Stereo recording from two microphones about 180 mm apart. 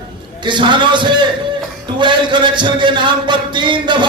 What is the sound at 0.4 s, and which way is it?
A man's voice, 25° right (ahead or behind).